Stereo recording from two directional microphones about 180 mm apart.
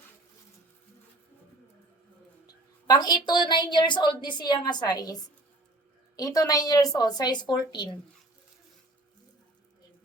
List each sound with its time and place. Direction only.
2.8 s a woman's voice: 20° left (ahead or behind)
6.1 s a woman's voice: 20° left (ahead or behind)